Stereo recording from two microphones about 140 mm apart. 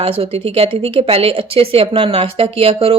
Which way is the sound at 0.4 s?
45° right (ahead or behind).